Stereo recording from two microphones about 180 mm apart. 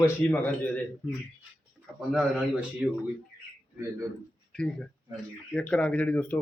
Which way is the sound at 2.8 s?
5° right (ahead or behind).